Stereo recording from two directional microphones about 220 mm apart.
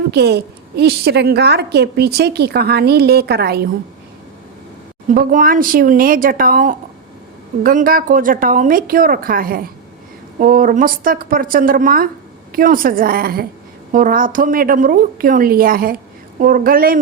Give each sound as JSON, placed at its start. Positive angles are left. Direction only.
{"t": 0.1, "sound": "a woman's voice", "side_deg": -50}
{"t": 5.0, "sound": "a woman's voice", "side_deg": -40}